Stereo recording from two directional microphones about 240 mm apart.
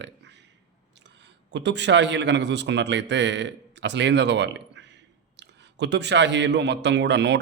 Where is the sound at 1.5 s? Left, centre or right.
Right.